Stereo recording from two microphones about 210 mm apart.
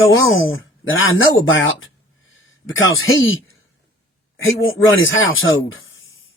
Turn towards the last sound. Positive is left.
turn(degrees=70)  # may be behind; listen again after turning